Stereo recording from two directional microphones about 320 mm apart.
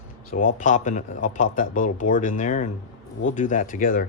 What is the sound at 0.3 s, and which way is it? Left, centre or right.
Speech, left.